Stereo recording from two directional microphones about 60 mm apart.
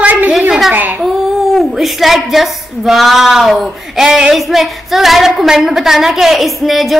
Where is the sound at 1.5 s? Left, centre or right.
Centre.